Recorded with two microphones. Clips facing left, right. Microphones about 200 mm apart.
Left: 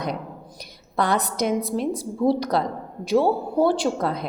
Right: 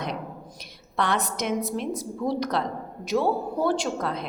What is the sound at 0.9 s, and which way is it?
A woman's voice, 35° left (ahead or behind).